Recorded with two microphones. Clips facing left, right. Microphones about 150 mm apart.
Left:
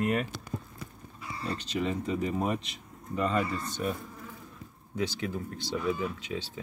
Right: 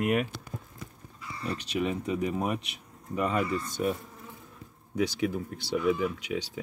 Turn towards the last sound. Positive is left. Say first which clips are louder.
# right 3 dB
turn(degrees=-10)  # may be behind; listen again after turning